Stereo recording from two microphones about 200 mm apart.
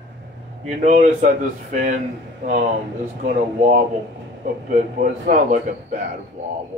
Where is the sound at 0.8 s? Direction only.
35° right (ahead or behind).